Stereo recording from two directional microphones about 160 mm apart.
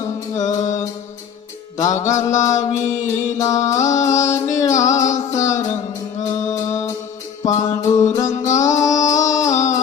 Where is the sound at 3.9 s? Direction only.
50° left (ahead or behind).